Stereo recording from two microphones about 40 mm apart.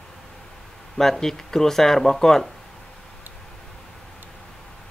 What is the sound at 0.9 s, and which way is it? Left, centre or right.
Speech, centre.